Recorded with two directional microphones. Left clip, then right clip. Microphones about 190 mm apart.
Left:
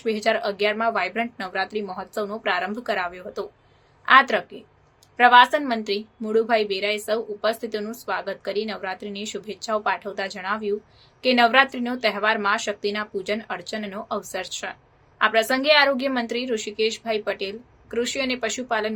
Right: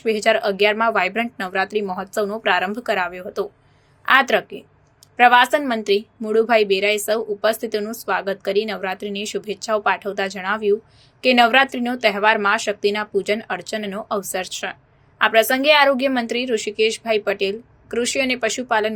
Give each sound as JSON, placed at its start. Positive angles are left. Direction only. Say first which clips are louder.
{"t": 0.0, "sound": "a woman's voice", "louder": "right 5 dB", "side_deg": -15}